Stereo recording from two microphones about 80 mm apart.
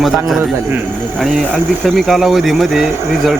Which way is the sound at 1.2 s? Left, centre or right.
Centre.